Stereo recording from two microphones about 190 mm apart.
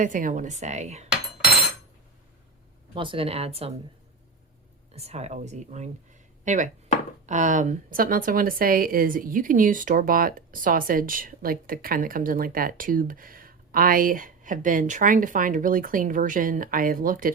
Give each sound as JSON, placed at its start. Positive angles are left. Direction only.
{"t": 0.0, "sound": "speech", "side_deg": -45}
{"t": 2.9, "sound": "speech", "side_deg": -25}
{"t": 4.9, "sound": "speech", "side_deg": -35}